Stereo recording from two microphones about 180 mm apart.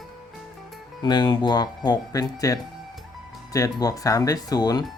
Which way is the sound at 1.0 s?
25° left (ahead or behind).